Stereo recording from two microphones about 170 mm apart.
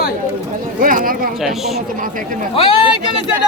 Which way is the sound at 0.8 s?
55° right (ahead or behind).